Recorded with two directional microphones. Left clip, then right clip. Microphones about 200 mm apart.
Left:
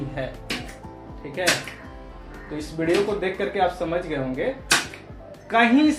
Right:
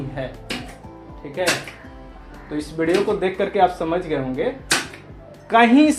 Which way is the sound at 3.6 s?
45° right (ahead or behind).